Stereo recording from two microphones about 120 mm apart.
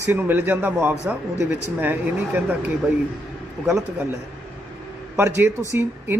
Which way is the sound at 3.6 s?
10° left (ahead or behind).